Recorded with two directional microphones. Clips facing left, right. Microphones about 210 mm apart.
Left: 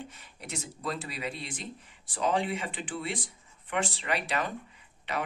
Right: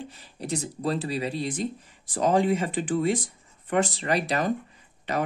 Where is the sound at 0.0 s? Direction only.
35° right (ahead or behind).